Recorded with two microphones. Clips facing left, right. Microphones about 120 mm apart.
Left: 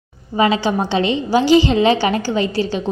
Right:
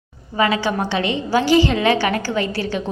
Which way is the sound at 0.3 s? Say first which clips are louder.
Left 3 dB; 20° left (ahead or behind).